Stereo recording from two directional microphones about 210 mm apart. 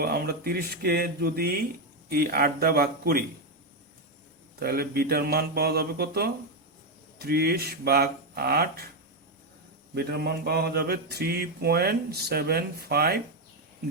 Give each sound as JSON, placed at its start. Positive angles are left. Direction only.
{"t": 0.0, "sound": "mantra", "side_deg": -45}
{"t": 4.6, "sound": "mantra", "side_deg": -45}
{"t": 9.9, "sound": "mantra", "side_deg": -50}